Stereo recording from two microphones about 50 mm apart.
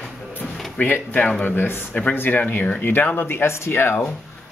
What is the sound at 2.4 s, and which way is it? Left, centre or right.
Speech, left.